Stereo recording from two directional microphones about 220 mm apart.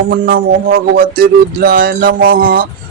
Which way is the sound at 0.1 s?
40° right (ahead or behind).